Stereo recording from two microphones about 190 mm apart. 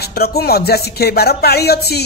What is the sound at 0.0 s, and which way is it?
A woman's voice, 55° left (ahead or behind).